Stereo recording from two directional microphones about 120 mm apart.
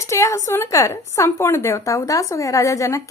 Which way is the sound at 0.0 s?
25° left (ahead or behind).